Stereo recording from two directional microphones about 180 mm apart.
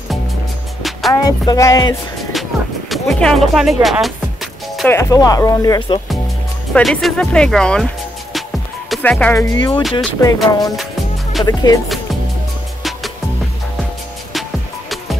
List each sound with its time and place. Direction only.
1.1 s speech: 20° left (ahead or behind)
2.9 s music: centre (ahead or behind)
4.8 s speech: 15° left (ahead or behind)
6.7 s speech: centre (ahead or behind); by 11.8 s 20° left (ahead or behind)